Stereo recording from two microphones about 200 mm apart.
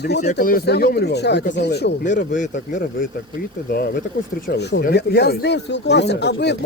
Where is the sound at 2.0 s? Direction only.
40° left (ahead or behind).